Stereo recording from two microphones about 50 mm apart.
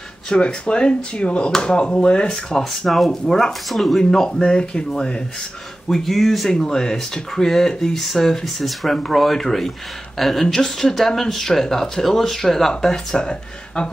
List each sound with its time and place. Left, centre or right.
0.3 s speech: centre
2.3 s speech: centre
4.1 s speech: centre
5.9 s speech: centre